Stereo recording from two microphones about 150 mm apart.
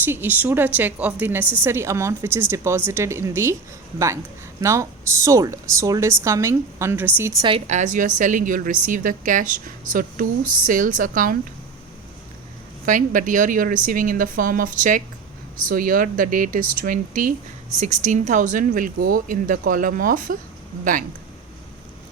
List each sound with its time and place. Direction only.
0.0 s a woman's voice: 15° right (ahead or behind)
7.7 s speech: 55° right (ahead or behind)
12.8 s speech: 60° right (ahead or behind)
17.7 s speech: 50° right (ahead or behind)